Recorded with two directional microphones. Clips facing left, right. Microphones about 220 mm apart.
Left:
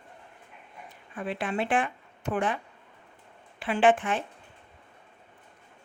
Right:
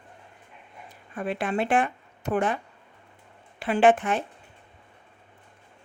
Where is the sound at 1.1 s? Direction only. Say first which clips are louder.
Right 3 dB; 45° right (ahead or behind).